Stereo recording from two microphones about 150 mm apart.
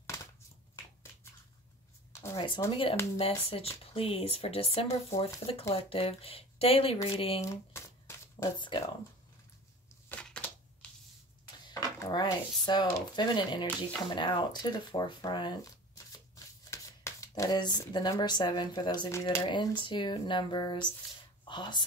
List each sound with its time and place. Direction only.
0.0 s crushing: 20° left (ahead or behind)
2.3 s speech: 35° left (ahead or behind)
7.4 s shuffling cards: 20° left (ahead or behind)
8.5 s speech: 30° left (ahead or behind)
10.0 s a sound: 10° left (ahead or behind)
11.6 s speech: 25° left (ahead or behind)